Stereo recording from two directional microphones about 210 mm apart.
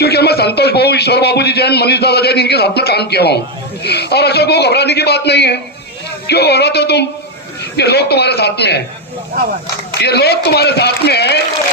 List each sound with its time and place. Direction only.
0.0 s a man's voice: 50° left (ahead or behind)
10.0 s a man's voice: 50° left (ahead or behind)